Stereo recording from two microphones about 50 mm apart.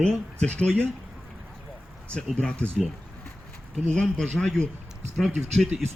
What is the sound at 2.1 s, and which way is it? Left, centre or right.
Speech, left.